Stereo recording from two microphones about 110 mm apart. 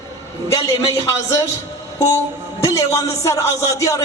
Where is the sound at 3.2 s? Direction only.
30° left (ahead or behind).